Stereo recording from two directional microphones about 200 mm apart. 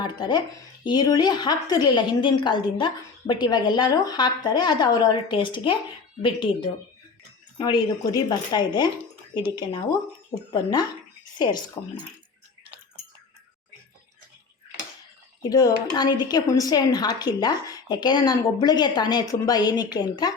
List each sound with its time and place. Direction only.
0.0 s a woman's voice: 20° left (ahead or behind)
10.5 s a woman's voice: 20° left (ahead or behind)
15.4 s a woman's voice: 20° left (ahead or behind)